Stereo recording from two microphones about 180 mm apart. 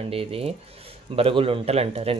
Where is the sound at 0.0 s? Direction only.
30° right (ahead or behind).